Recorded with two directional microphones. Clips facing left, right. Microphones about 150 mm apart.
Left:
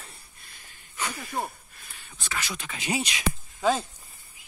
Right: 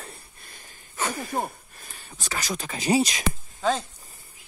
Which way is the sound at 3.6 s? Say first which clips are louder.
Left 1 dB; 10° left (ahead or behind).